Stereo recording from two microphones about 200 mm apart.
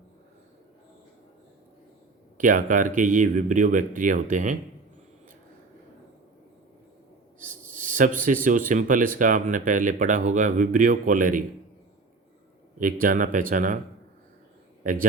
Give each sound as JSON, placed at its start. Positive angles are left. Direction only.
{"t": 2.4, "sound": "speech", "side_deg": -40}
{"t": 7.3, "sound": "a sound", "side_deg": -40}
{"t": 8.4, "sound": "speech", "side_deg": -40}
{"t": 12.8, "sound": "speech", "side_deg": -45}